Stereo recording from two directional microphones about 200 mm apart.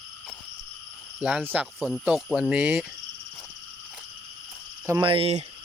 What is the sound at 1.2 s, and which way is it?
Speech, 5° right (ahead or behind).